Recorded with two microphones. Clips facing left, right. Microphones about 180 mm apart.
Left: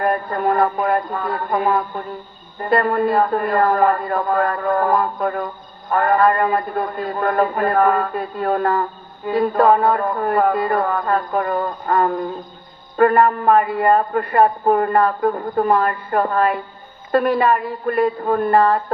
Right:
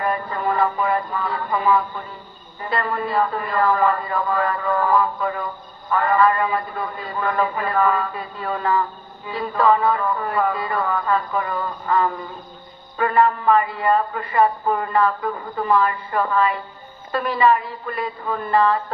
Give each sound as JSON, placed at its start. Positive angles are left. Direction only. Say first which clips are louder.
{"t": 0.0, "sound": "a woman's voice", "louder": "left 4 dB", "side_deg": 50}